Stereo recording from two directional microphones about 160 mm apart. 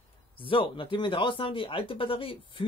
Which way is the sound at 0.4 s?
30° left (ahead or behind).